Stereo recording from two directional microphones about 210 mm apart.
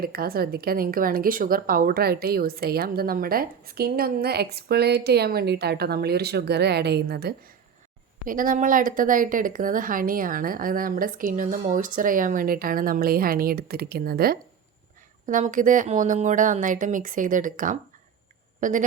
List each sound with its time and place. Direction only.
0.0 s speech: 45° right (ahead or behind)